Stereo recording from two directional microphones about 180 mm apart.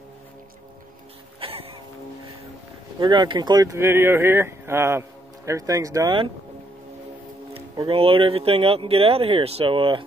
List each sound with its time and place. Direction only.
1.4 s a sound: 35° right (ahead or behind)
3.0 s speech: 25° right (ahead or behind)
7.5 s speech: 30° right (ahead or behind)